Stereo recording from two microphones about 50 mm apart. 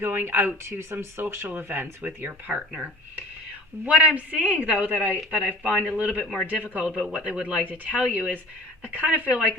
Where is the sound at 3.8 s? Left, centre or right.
Right.